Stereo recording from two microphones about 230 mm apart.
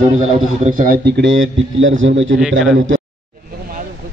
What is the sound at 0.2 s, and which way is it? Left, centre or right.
A man's voice, right.